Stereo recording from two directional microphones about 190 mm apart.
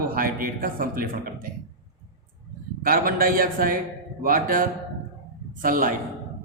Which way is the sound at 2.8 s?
50° right (ahead or behind).